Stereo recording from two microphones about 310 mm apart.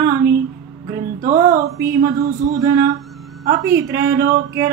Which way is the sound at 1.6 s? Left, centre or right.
Centre.